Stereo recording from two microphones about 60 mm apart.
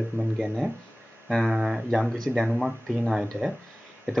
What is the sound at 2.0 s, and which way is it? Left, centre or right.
Speech, centre.